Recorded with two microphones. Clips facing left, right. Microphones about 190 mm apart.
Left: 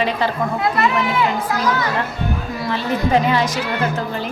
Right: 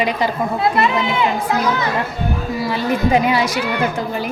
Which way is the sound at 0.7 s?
25° right (ahead or behind).